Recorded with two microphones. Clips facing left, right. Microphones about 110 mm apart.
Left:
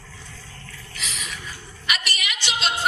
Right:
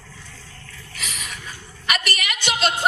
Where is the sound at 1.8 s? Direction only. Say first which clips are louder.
Right 3 dB; 50° right (ahead or behind).